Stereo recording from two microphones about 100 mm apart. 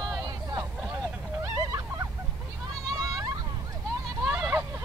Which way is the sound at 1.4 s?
35° right (ahead or behind).